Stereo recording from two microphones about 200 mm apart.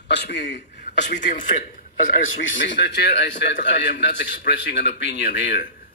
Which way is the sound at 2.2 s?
65° left (ahead or behind).